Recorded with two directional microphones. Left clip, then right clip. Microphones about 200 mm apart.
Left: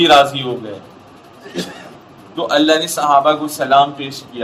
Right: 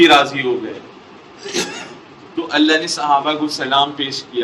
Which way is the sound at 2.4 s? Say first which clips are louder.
Left 2 dB; 45° left (ahead or behind).